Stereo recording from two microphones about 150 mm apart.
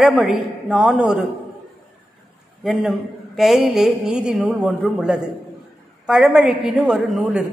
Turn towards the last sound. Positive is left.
turn(degrees=0)  # may be behind; listen again after turning